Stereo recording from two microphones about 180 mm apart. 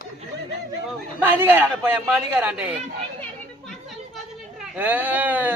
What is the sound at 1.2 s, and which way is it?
Speech, 10° right (ahead or behind).